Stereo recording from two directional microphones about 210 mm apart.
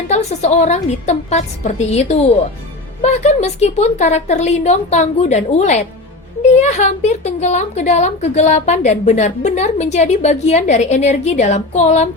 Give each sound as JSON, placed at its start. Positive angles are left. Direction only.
{"t": 0.1, "sound": "a woman's voice", "side_deg": 30}